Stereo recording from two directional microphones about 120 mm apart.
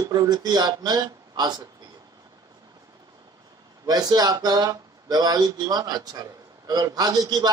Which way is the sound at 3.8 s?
35° right (ahead or behind).